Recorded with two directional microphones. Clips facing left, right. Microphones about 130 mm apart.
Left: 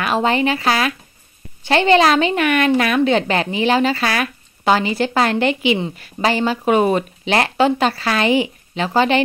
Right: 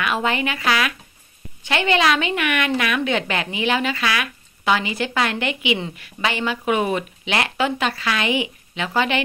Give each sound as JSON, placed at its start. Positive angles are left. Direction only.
{"t": 0.0, "sound": "a woman's voice", "side_deg": 35}